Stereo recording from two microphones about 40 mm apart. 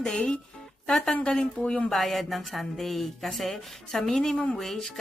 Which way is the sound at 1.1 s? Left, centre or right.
Left.